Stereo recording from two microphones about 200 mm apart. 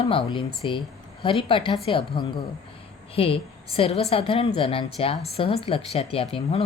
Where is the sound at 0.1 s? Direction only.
25° left (ahead or behind).